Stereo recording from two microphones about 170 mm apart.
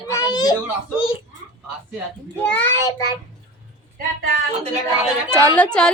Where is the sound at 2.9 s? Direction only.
20° left (ahead or behind).